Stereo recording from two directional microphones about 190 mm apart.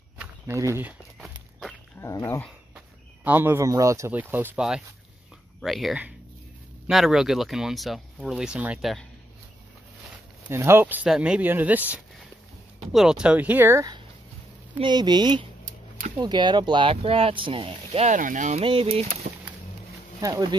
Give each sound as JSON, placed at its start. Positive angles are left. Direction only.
{"t": 0.2, "sound": "a sound", "side_deg": -15}
{"t": 2.0, "sound": "speech", "side_deg": 15}
{"t": 3.3, "sound": "speech", "side_deg": -10}
{"t": 10.5, "sound": "speech", "side_deg": -15}
{"t": 12.9, "sound": "speech", "side_deg": -5}
{"t": 18.6, "sound": "speech", "side_deg": -30}
{"t": 19.2, "sound": "a sound", "side_deg": -40}
{"t": 20.2, "sound": "speech", "side_deg": -20}